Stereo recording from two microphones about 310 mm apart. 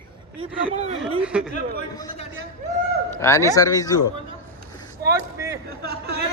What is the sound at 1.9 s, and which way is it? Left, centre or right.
Speech, centre.